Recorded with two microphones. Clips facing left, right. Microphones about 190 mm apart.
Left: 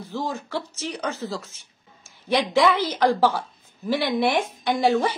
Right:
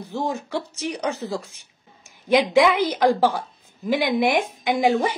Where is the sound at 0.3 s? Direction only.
15° right (ahead or behind).